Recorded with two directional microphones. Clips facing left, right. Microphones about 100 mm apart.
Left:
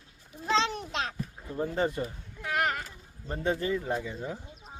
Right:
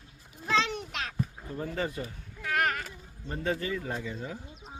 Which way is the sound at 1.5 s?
25° left (ahead or behind).